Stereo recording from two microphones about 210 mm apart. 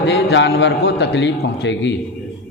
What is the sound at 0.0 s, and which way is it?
A man's voice, 55° left (ahead or behind).